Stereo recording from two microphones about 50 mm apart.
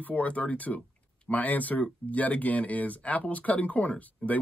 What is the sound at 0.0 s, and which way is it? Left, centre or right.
Speech, left.